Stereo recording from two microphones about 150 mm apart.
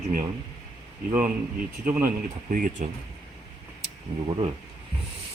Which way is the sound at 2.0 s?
65° right (ahead or behind).